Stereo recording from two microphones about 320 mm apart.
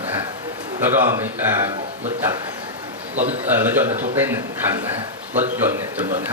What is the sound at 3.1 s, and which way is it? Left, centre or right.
Speech, right.